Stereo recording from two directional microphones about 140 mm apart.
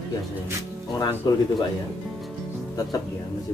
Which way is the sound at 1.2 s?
30° left (ahead or behind).